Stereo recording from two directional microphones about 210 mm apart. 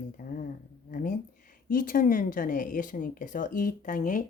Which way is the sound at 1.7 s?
40° left (ahead or behind).